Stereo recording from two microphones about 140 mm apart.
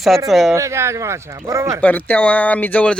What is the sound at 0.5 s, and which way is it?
Speech, 20° right (ahead or behind).